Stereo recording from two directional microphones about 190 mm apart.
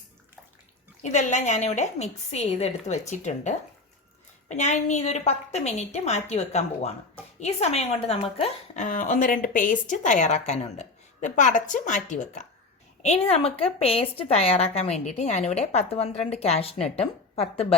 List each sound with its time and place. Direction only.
1.0 s a woman's voice: 40° left (ahead or behind)